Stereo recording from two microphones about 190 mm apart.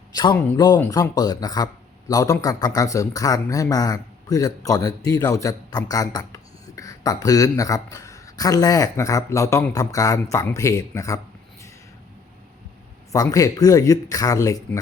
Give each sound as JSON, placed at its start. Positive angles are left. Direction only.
{"t": 0.1, "sound": "speech", "side_deg": 20}
{"t": 13.1, "sound": "speech", "side_deg": 15}